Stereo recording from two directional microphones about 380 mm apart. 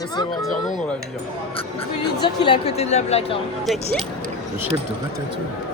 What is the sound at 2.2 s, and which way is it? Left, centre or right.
A woman's voice, centre.